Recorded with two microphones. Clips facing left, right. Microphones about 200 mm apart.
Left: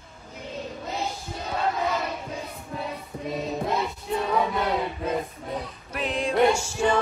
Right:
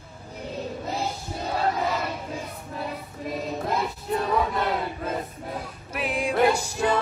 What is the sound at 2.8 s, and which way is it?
Music, centre (ahead or behind).